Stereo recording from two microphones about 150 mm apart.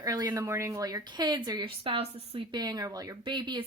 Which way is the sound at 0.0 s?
25° right (ahead or behind).